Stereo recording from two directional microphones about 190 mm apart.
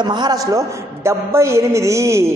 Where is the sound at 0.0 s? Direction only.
25° right (ahead or behind).